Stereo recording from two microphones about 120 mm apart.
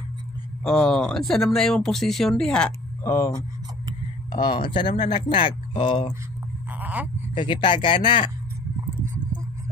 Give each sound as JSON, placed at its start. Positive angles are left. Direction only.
{"t": 0.7, "sound": "speech", "side_deg": 5}
{"t": 3.0, "sound": "speech", "side_deg": 20}
{"t": 4.3, "sound": "speech", "side_deg": 40}
{"t": 6.8, "sound": "a sound", "side_deg": -10}
{"t": 7.3, "sound": "speech", "side_deg": 40}